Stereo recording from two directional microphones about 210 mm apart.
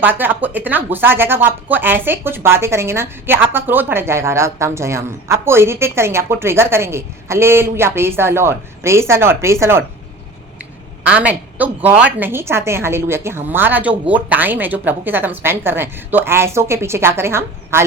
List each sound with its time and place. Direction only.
0.0 s speech: 10° right (ahead or behind)
11.0 s speech: 5° right (ahead or behind)